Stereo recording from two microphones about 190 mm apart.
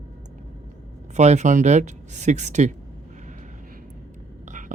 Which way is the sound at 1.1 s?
35° right (ahead or behind).